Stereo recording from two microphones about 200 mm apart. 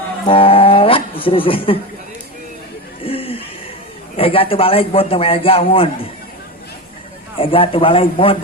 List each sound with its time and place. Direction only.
0.3 s speech: 30° left (ahead or behind)
3.0 s a sound: 30° left (ahead or behind)
4.2 s a man's voice: 25° left (ahead or behind)
7.3 s a man's voice: 25° left (ahead or behind)